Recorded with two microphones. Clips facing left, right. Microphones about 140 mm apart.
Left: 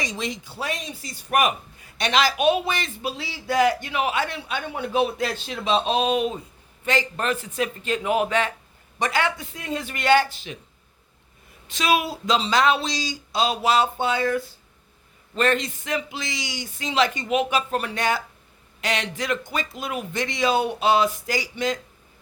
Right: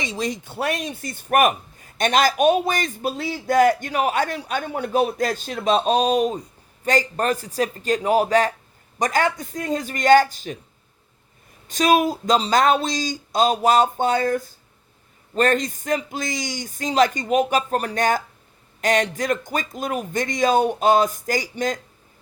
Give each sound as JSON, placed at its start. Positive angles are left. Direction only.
{"t": 0.2, "sound": "a man's voice", "side_deg": -50}
{"t": 11.7, "sound": "a man's voice", "side_deg": -45}